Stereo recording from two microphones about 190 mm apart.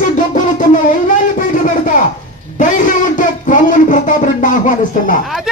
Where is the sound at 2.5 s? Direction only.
45° left (ahead or behind).